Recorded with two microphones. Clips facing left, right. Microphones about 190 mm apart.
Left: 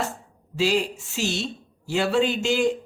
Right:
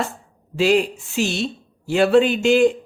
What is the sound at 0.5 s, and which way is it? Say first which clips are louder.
Speech: right 6 dB; 55° right (ahead or behind).